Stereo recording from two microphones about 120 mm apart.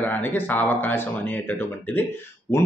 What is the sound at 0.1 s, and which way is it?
Speech, 15° left (ahead or behind).